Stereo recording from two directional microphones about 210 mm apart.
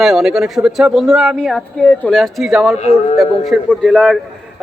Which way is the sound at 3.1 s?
Centre (ahead or behind).